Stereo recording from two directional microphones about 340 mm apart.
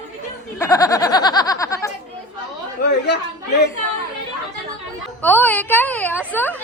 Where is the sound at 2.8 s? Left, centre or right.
Left.